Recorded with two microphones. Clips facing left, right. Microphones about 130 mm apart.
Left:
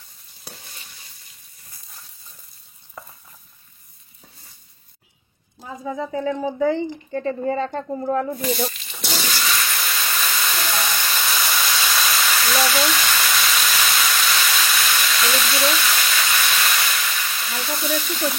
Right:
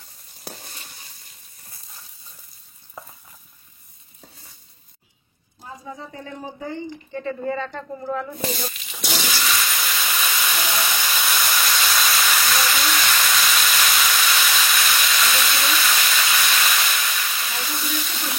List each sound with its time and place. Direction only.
0.5 s a sound: 40° right (ahead or behind)
3.0 s stir: centre (ahead or behind)
7.1 s a woman's voice: 40° left (ahead or behind)
8.7 s steam: centre (ahead or behind)